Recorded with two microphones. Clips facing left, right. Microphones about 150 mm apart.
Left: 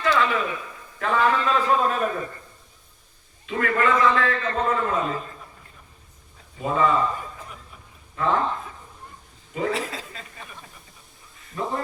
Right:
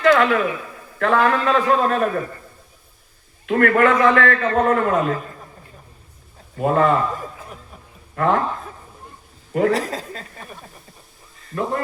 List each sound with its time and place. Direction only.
0.0 s a sound: 65° right (ahead or behind)
0.9 s a man's voice: 60° right (ahead or behind)
3.4 s a man's voice: 60° right (ahead or behind)
6.6 s a man's voice: 60° right (ahead or behind)
8.1 s speech: 60° right (ahead or behind)
9.5 s a man's voice: 60° right (ahead or behind)
9.7 s speech: 40° right (ahead or behind)
11.5 s speech: 75° right (ahead or behind)